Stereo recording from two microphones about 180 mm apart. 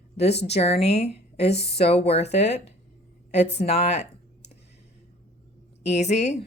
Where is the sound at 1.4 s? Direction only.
70° left (ahead or behind).